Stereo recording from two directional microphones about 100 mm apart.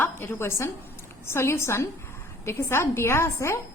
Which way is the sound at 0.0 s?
25° left (ahead or behind).